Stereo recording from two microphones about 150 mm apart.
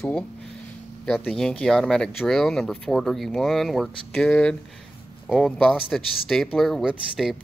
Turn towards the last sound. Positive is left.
turn(degrees=0)  # may be behind; listen again after turning